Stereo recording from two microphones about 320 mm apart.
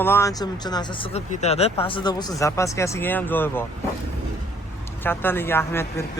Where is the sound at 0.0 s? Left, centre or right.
Centre.